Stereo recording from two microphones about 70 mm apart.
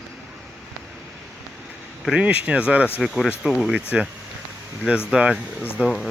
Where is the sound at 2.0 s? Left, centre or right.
Centre.